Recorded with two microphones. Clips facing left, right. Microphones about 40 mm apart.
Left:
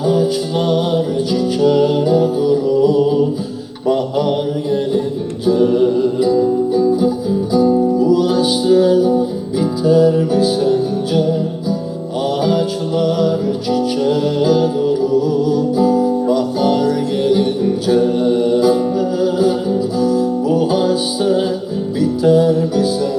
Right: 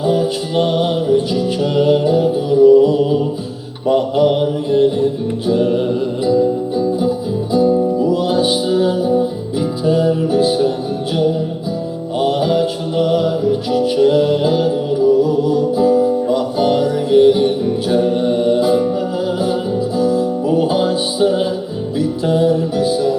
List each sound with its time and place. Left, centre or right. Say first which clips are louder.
0.0 s music: left 1 dB; centre
3.8 s mantra: right 2 dB; centre
5.5 s music: left 3 dB; centre